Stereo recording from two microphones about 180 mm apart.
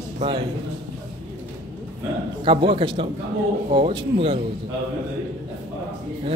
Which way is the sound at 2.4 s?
30° right (ahead or behind).